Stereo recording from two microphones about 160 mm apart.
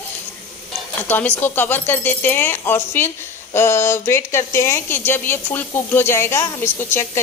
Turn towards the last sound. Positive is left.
turn(degrees=15)  # may be behind; listen again after turning